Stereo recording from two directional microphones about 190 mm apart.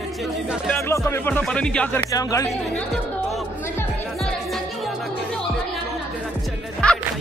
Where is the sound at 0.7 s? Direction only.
15° left (ahead or behind).